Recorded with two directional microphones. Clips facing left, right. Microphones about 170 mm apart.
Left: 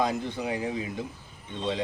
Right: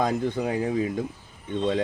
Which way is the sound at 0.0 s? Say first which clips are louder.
Right 4 dB; 50° right (ahead or behind).